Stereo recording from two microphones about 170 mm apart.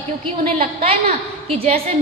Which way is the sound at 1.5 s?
35° right (ahead or behind).